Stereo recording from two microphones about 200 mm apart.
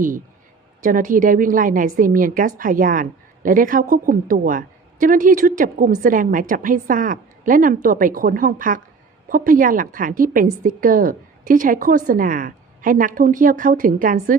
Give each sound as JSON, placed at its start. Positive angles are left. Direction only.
{"t": 0.8, "sound": "a woman's voice", "side_deg": -45}